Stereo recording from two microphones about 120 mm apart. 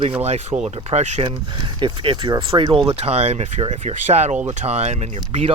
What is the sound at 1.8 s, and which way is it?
Speech, 45° right (ahead or behind).